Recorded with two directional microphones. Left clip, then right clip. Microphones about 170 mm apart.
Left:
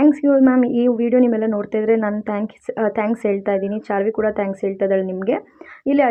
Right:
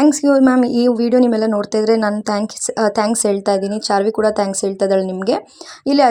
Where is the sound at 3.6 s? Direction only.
60° right (ahead or behind).